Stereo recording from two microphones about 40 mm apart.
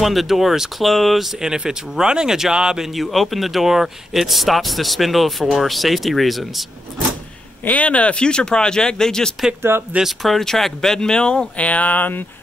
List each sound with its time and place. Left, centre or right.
0.0 s speech: centre
1.2 s speech: centre
2.9 s speech: centre
7.6 s speech: left; by 9.3 s centre
9.6 s speech: right
10.0 s speech: centre; by 11.6 s left
11.6 s speech: left